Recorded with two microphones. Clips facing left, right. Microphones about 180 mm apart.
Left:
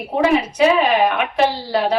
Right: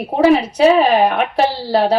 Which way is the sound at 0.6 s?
35° right (ahead or behind).